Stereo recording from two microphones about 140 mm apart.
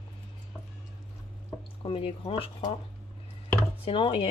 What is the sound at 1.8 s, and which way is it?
Speech, 40° left (ahead or behind).